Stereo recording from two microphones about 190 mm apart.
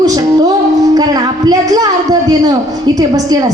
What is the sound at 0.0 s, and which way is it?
Music, 20° right (ahead or behind).